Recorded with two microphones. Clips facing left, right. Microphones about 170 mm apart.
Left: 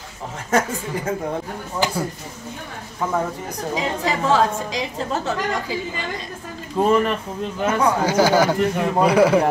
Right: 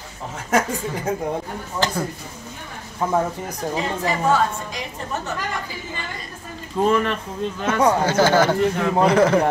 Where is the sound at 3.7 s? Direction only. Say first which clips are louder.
Left 1 dB; 90° left.